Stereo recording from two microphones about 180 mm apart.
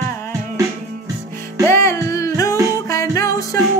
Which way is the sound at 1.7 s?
15° left (ahead or behind).